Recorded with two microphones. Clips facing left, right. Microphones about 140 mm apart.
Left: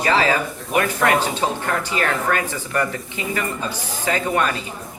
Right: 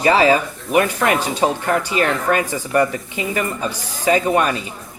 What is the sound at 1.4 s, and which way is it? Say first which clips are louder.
Speech: right 4 dB; 20° right (ahead or behind).